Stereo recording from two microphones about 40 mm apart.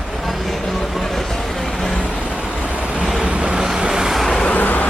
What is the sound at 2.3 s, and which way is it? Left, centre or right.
Vehicle, right.